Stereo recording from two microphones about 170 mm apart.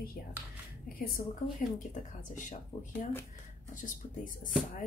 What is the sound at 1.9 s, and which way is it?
Speech, 45° left (ahead or behind).